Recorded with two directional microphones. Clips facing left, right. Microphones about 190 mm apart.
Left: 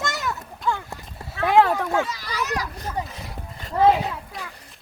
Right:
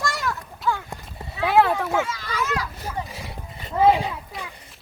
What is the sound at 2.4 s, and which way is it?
Children playing, 40° left (ahead or behind).